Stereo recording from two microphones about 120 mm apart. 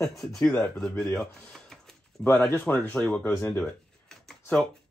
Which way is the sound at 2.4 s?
15° left (ahead or behind).